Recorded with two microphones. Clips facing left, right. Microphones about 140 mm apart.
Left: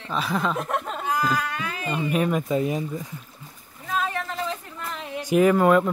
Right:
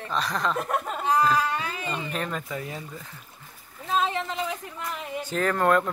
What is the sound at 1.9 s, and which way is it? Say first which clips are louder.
Speech: left 10 dB; 5° left (ahead or behind).